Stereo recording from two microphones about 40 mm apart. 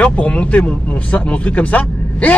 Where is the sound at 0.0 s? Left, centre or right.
Left.